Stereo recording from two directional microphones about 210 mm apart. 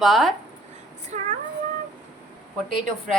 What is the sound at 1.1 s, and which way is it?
Child singing, 35° right (ahead or behind).